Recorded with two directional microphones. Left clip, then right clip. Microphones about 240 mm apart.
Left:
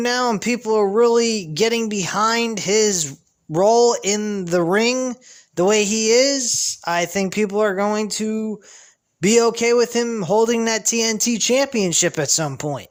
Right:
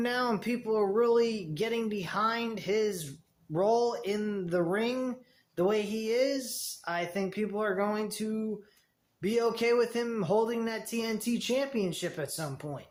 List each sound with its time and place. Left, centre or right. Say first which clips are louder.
0.0 s speech: left 11 dB; left